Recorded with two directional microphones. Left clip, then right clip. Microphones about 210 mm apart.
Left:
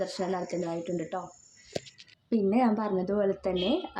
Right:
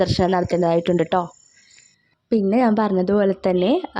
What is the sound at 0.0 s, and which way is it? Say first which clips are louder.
A woman's voice: right 12 dB; 45° right (ahead or behind).